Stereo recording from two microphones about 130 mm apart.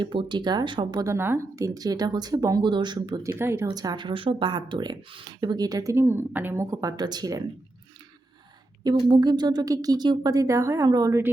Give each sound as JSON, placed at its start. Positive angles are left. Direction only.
{"t": 0.0, "sound": "speech", "side_deg": -40}
{"t": 3.2, "sound": "speech", "side_deg": -20}
{"t": 8.8, "sound": "speech", "side_deg": -35}